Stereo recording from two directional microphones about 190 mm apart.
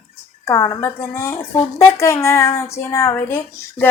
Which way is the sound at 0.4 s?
15° left (ahead or behind).